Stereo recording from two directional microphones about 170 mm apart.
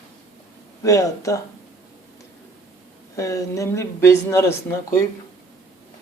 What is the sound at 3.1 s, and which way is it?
Speech, 20° left (ahead or behind).